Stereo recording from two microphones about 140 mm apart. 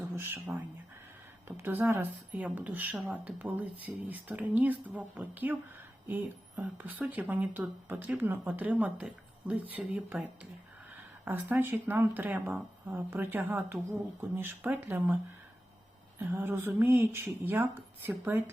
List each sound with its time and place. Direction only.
0.2 s speech: 15° right (ahead or behind)
11.3 s speech: 15° right (ahead or behind)